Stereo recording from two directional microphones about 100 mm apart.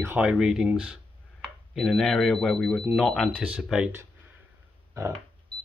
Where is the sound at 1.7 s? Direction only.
Centre (ahead or behind).